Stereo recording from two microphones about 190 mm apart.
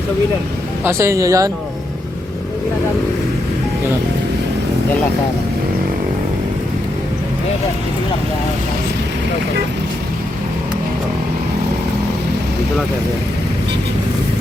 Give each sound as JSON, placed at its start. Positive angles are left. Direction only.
{"t": 0.9, "sound": "speech", "side_deg": -15}